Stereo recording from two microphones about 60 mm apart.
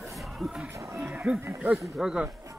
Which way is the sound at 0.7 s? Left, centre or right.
Right.